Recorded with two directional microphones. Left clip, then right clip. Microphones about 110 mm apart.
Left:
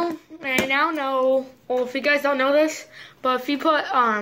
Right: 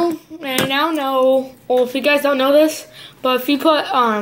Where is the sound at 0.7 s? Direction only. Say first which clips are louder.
Right 5 dB; 20° right (ahead or behind).